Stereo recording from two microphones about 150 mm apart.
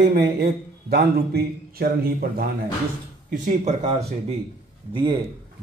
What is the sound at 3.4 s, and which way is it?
Speech, 50° right (ahead or behind).